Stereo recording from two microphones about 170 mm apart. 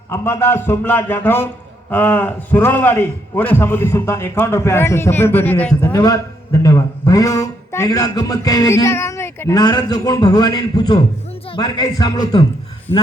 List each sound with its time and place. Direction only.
0.1 s a man's voice: 15° left (ahead or behind)
5.8 s speech: 20° left (ahead or behind)